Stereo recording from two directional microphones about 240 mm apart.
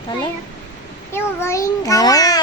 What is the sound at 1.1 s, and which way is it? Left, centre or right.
A child's voice, centre.